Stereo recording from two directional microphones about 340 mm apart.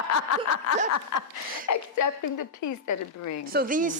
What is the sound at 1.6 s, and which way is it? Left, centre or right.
A woman's voice, left.